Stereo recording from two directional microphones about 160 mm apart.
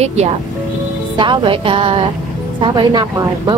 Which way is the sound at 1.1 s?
30° right (ahead or behind).